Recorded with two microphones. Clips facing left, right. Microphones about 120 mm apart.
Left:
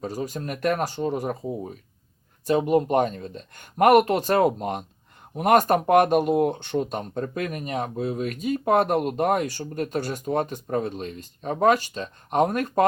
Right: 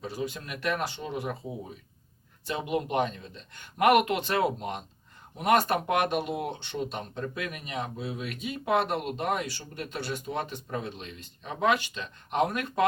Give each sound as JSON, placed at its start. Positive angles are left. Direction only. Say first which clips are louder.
{"t": 0.0, "sound": "speech", "louder": "left 5 dB", "side_deg": 45}